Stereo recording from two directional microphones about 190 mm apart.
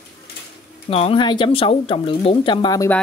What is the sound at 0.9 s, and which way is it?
Speech, 30° left (ahead or behind).